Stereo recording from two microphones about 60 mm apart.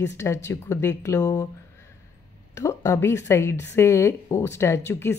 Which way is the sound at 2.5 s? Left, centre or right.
Left.